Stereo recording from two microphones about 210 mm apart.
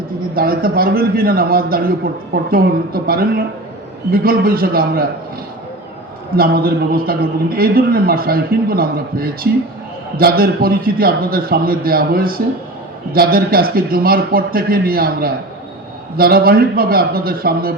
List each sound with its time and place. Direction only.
0.3 s a man's voice: 45° right (ahead or behind)
6.3 s a man's voice: 45° right (ahead or behind)